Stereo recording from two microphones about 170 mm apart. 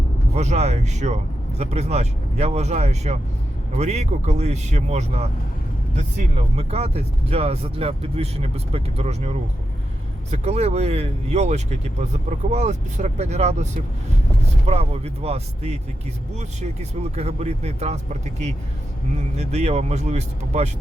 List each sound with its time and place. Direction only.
0.3 s speech: 40° right (ahead or behind)
14.7 s speech: 35° right (ahead or behind)